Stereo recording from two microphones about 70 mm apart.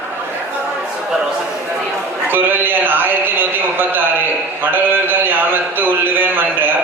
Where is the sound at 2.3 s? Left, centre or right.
Right.